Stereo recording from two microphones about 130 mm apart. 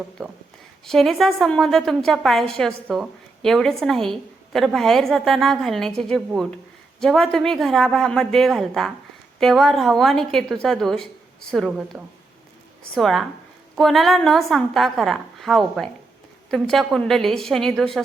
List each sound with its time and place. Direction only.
0.9 s a woman's voice: centre (ahead or behind)